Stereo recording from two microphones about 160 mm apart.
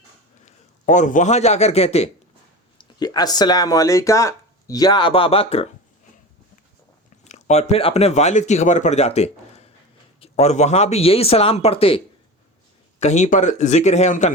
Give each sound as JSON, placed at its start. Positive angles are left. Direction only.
{"t": 0.4, "sound": "a man's voice", "side_deg": 50}
{"t": 2.7, "sound": "speech", "side_deg": 30}
{"t": 7.3, "sound": "speech", "side_deg": 45}
{"t": 13.0, "sound": "speech", "side_deg": 45}